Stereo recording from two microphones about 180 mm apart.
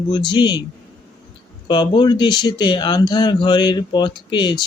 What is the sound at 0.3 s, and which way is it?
Speech, 25° left (ahead or behind).